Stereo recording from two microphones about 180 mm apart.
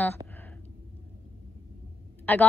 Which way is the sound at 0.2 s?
20° right (ahead or behind).